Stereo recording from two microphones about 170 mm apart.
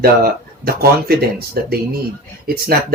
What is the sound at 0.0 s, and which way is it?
Speech, 60° right (ahead or behind).